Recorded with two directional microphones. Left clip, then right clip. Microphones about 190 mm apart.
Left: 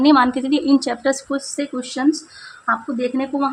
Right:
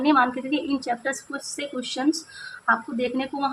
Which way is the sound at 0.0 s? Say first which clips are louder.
Left 6 dB; 40° left (ahead or behind).